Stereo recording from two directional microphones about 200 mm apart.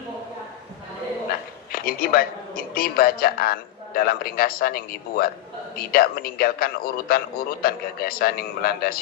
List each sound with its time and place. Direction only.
1.7 s a man's voice: 45° left (ahead or behind)